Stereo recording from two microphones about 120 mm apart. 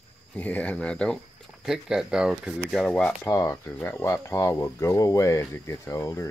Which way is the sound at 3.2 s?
25° left (ahead or behind).